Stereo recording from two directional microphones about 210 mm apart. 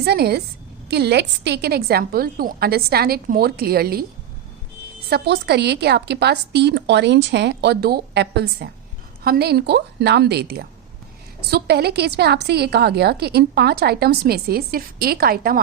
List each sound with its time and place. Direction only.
0.0 s a woman's voice: 50° right (ahead or behind)
5.0 s a woman's voice: 50° right (ahead or behind)